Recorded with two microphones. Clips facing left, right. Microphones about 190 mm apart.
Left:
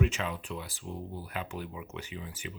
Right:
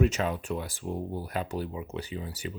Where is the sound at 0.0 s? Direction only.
40° right (ahead or behind).